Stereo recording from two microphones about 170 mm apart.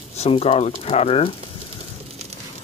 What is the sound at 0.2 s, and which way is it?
Speech, 40° left (ahead or behind).